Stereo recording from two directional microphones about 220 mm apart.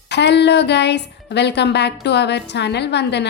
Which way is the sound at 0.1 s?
50° left (ahead or behind).